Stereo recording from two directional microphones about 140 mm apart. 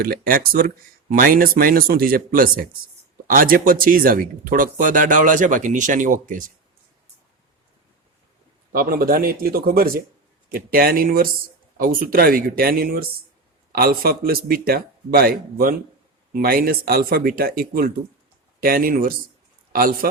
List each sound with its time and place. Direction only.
0.0 s speech: 90° right; by 6.5 s 70° right (ahead or behind)
8.7 s speech: 90° right